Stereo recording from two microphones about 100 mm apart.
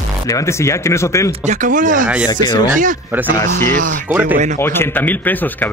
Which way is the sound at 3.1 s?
20° right (ahead or behind).